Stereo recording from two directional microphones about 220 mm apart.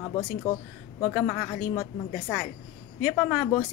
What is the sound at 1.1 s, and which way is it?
Speech, 5° left (ahead or behind).